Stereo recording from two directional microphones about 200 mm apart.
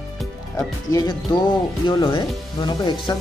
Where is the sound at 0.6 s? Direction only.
20° left (ahead or behind).